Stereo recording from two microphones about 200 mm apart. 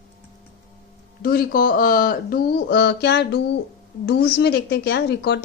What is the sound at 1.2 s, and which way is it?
A woman's voice, 45° left (ahead or behind).